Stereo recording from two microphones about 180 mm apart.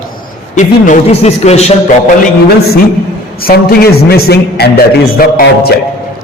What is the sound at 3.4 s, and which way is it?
A man's voice, 60° left (ahead or behind).